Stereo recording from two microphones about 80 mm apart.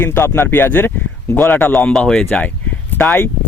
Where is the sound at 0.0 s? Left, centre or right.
Left.